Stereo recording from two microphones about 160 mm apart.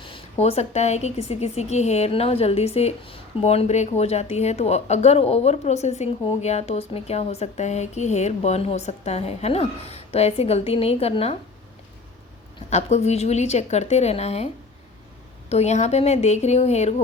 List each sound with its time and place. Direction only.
0.0 s speech: 35° left (ahead or behind)
12.7 s a woman's voice: 45° left (ahead or behind)